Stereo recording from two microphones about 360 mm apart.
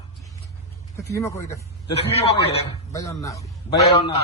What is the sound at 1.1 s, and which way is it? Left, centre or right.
A man's voice, centre.